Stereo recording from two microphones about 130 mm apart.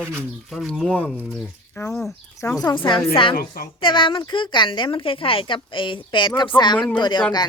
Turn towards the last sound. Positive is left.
turn(degrees=35)  # may be behind; listen again after turning